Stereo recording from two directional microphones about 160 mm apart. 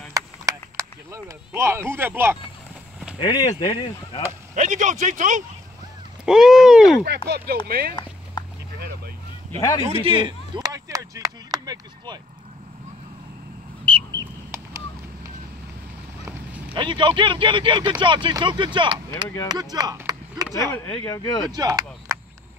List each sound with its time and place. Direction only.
0.1 s a sound: 20° right (ahead or behind)
3.2 s speech: 30° left (ahead or behind)
4.6 s speech: 50° right (ahead or behind)
6.2 s speech: 5° right (ahead or behind)
7.2 s speech: 90° right; by 7.9 s 70° right (ahead or behind)
8.7 s boat: 70° right (ahead or behind)
9.6 s speech: 25° left (ahead or behind)
10.0 s a sound: 30° right (ahead or behind)
13.8 s duck: 30° right (ahead or behind)
16.3 s boat: 10° right (ahead or behind)
16.7 s speech: 30° right (ahead or behind)
21.0 s speech: 20° left (ahead or behind)
21.5 s speech: 25° right (ahead or behind)